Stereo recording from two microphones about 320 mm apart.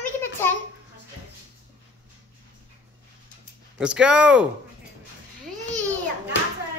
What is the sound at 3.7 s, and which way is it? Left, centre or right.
Speech, centre.